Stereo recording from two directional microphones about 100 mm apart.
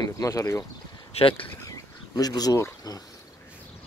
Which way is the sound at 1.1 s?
65° left (ahead or behind).